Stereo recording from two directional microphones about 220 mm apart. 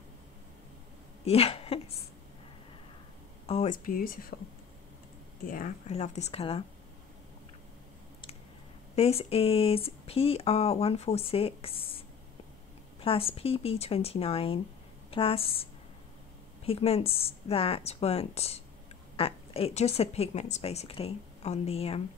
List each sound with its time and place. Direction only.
1.2 s speech: 25° left (ahead or behind)
3.4 s speech: 30° left (ahead or behind)
5.5 s a woman's voice: 35° left (ahead or behind)
8.9 s a woman's voice: 25° left (ahead or behind)
13.0 s a woman's voice: 25° left (ahead or behind)
16.6 s a woman's voice: 25° left (ahead or behind)